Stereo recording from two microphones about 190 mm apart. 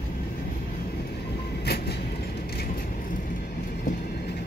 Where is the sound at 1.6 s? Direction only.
60° left (ahead or behind).